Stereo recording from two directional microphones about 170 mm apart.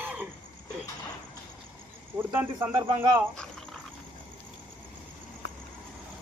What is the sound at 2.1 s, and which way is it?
Speech, 15° right (ahead or behind).